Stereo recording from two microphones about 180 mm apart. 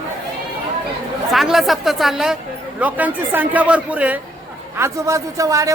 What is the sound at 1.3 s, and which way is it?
A woman's voice, centre (ahead or behind).